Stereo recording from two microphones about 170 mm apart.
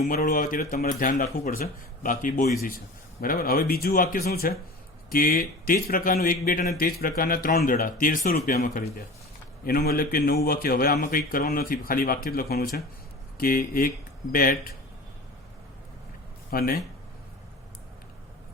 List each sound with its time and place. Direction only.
0.1 s speech: 55° left (ahead or behind)
9.6 s speech: 60° left (ahead or behind)
16.5 s speech: 60° left (ahead or behind)